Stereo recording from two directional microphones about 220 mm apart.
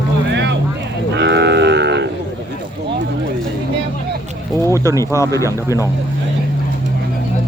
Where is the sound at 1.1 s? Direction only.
50° right (ahead or behind).